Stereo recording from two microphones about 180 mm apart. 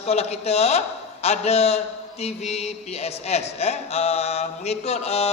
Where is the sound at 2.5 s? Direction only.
35° left (ahead or behind).